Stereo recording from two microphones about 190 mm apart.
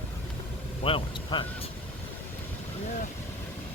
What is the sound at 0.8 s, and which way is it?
Speech, 25° left (ahead or behind).